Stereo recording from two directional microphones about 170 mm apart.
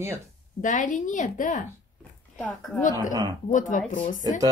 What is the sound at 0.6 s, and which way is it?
A woman's voice, 50° left (ahead or behind).